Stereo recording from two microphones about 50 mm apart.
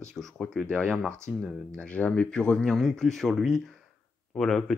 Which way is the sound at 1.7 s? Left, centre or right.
Left.